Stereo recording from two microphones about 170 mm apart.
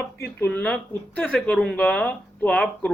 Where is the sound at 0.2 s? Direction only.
10° left (ahead or behind).